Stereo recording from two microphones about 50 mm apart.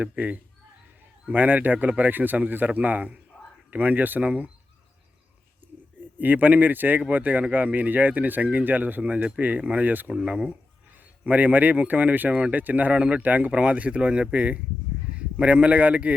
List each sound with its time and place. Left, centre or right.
0.0 s speech: right
1.3 s speech: right
4.3 s speech: right
6.1 s speech: right
10.1 s speech: centre
11.3 s speech: right
12.9 s speech: right